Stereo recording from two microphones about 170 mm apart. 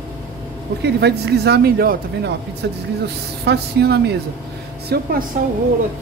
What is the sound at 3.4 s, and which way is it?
Speech, 75° right (ahead or behind).